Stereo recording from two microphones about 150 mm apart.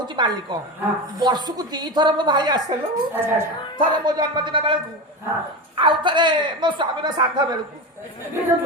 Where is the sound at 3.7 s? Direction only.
30° right (ahead or behind).